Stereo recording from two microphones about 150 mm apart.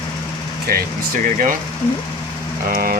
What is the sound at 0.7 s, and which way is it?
Speech, 90° right.